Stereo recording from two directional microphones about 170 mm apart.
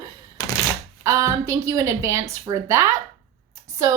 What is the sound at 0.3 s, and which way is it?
Thunk, 20° left (ahead or behind).